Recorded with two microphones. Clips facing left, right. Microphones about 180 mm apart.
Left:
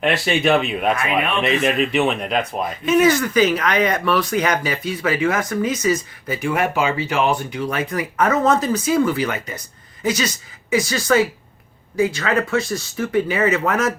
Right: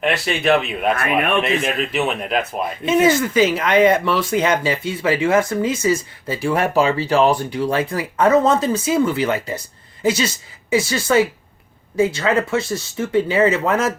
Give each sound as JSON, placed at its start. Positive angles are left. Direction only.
{"t": 0.0, "sound": "speech", "side_deg": 0}
{"t": 0.9, "sound": "speech", "side_deg": -55}
{"t": 1.4, "sound": "speech", "side_deg": 0}
{"t": 2.8, "sound": "speech", "side_deg": -25}